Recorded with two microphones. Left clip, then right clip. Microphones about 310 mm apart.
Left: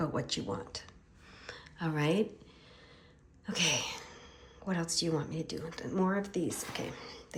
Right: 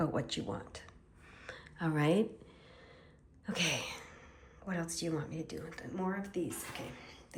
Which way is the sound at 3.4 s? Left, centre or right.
Centre.